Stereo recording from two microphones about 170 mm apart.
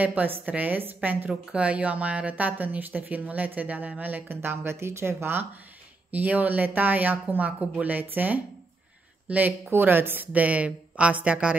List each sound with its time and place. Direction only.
0.0 s a woman's voice: 10° right (ahead or behind)